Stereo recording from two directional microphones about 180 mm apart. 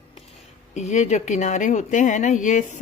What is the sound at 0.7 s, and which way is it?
Speech, 40° left (ahead or behind).